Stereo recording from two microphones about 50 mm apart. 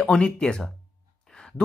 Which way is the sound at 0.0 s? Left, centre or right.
Centre.